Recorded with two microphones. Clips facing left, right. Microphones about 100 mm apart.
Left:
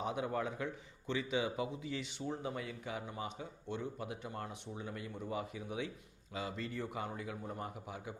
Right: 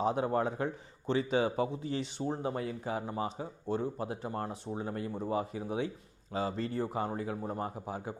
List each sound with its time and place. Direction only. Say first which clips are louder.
0.0 s speech: right 7 dB; 35° right (ahead or behind)